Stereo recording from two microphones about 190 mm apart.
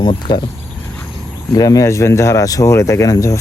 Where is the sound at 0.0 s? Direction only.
25° left (ahead or behind).